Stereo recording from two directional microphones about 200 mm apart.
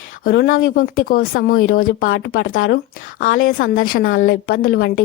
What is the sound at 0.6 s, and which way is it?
A woman's voice, 45° left (ahead or behind).